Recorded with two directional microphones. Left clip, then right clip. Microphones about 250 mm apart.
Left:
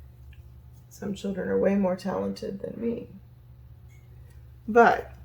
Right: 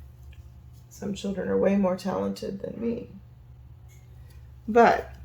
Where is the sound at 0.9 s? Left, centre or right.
Centre.